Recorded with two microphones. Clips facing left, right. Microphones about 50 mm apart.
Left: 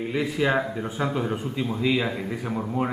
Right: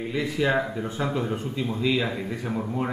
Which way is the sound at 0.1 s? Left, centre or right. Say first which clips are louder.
Even; centre.